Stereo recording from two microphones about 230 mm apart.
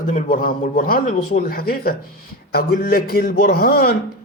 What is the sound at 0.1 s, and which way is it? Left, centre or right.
A man's voice, left.